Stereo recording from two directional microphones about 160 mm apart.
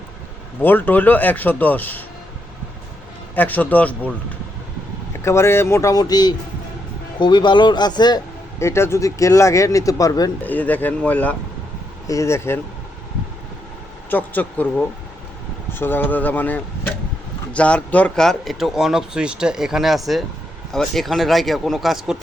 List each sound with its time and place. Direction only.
0.6 s speech: 10° left (ahead or behind)
3.3 s speech: 10° left (ahead or behind)
5.2 s speech: 15° left (ahead or behind)
10.4 s speech: 10° left (ahead or behind)
14.1 s speech: 10° left (ahead or behind)